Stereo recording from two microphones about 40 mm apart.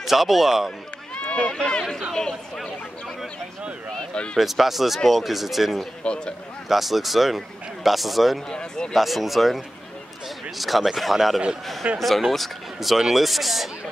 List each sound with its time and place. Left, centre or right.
0.0 s a man's voice: centre
1.1 s speech: left; by 3.2 s centre
4.1 s speech: left
4.4 s a man's voice: centre
6.0 s speech: left
6.7 s a man's voice: centre
8.5 s speech: left
8.9 s a man's voice: centre